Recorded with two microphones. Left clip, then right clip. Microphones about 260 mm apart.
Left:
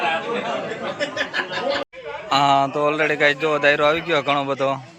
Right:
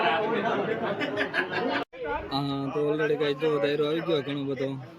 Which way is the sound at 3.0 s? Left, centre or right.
Centre.